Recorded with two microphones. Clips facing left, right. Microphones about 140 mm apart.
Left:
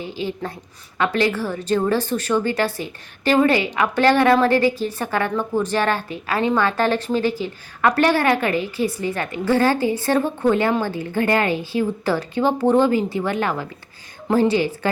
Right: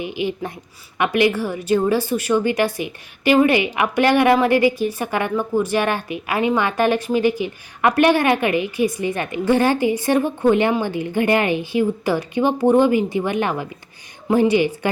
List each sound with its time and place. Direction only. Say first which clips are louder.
0.0 s speech: right 3 dB; 15° right (ahead or behind)